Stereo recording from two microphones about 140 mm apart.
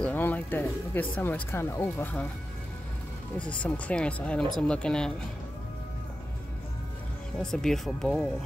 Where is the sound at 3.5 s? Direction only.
10° left (ahead or behind).